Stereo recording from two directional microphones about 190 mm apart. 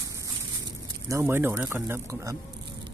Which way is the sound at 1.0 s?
15° right (ahead or behind).